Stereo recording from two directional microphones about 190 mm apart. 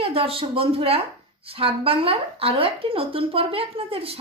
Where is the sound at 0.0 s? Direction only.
30° right (ahead or behind).